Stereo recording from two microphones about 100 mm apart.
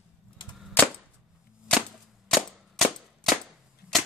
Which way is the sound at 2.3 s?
Centre (ahead or behind).